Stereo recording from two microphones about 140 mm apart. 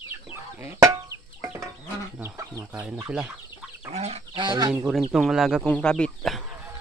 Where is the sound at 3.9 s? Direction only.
50° right (ahead or behind).